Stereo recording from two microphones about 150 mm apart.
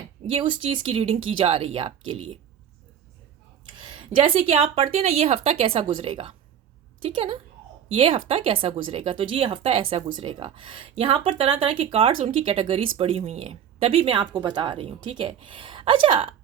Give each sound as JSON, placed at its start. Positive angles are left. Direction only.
{"t": 0.3, "sound": "speech", "side_deg": -35}
{"t": 3.8, "sound": "speech", "side_deg": -35}